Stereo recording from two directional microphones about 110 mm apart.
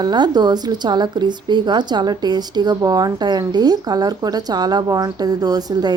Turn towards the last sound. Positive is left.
turn(degrees=-35)  # may be behind; listen again after turning